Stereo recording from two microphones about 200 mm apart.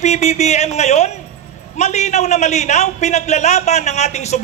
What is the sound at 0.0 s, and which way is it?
A man's voice, 35° left (ahead or behind).